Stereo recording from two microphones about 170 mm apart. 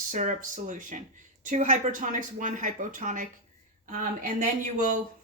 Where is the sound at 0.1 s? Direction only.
50° right (ahead or behind).